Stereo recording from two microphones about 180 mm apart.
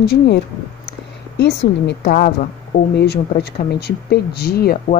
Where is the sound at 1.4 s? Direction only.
70° left (ahead or behind).